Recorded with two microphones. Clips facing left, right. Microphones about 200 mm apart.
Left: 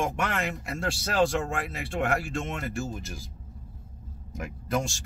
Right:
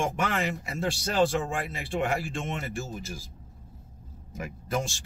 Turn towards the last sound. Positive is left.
turn(degrees=0)  # may be behind; listen again after turning